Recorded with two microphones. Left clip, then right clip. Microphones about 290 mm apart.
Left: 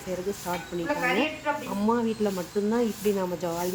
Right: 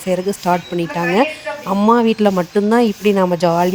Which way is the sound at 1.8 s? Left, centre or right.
Right.